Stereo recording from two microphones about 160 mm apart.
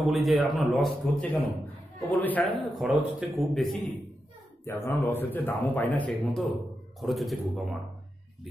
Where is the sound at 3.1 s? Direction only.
10° right (ahead or behind).